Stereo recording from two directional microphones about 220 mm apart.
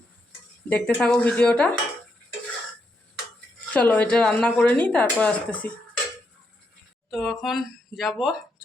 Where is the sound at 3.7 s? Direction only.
5° left (ahead or behind).